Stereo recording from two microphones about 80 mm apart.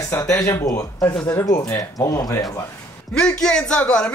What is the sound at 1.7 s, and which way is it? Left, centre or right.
Speech, left.